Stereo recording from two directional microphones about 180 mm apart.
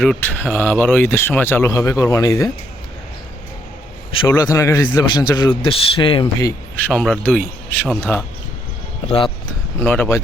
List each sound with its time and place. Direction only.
0.0 s speech: 5° left (ahead or behind)
4.1 s a man's voice: 25° left (ahead or behind)
6.7 s speech: 5° left (ahead or behind)
9.0 s a man's voice: 30° left (ahead or behind)
9.8 s speech: 10° left (ahead or behind)